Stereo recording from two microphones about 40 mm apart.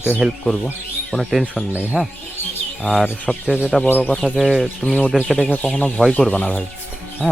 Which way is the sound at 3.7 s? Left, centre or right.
Centre.